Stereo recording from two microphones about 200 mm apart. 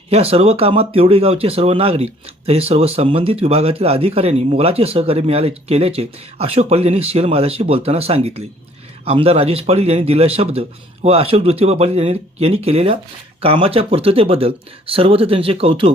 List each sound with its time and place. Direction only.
0.1 s speech: 30° right (ahead or behind)